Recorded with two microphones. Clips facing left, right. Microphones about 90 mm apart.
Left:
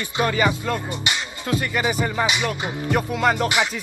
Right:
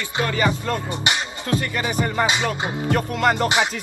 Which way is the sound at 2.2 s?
25° right (ahead or behind).